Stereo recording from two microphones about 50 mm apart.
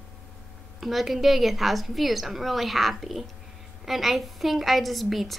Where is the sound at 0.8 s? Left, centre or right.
Centre.